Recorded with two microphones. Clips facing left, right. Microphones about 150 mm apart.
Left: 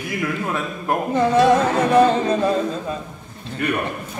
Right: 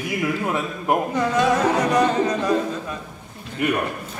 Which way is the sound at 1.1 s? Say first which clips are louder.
Left 8 dB; 30° left (ahead or behind).